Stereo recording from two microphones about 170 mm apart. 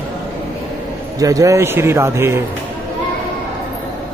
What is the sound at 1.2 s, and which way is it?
Speech, 20° right (ahead or behind).